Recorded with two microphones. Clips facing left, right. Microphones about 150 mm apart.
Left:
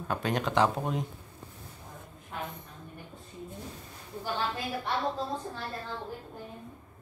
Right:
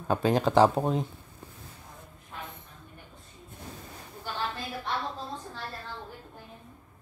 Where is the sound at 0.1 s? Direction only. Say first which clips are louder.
Right 6 dB; 30° right (ahead or behind).